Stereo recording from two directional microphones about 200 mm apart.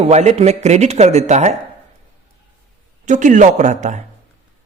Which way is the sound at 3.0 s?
40° right (ahead or behind).